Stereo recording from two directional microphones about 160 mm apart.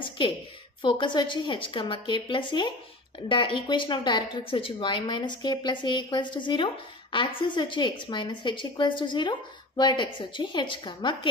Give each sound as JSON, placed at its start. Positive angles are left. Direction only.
{"t": 0.8, "sound": "a woman's voice", "side_deg": 30}